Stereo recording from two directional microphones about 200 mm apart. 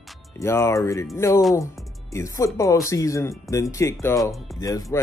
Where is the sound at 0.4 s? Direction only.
15° left (ahead or behind).